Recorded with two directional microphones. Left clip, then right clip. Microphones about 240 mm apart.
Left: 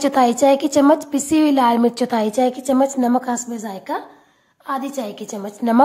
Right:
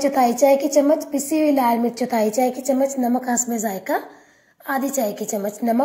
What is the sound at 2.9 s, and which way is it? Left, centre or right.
Speech, left.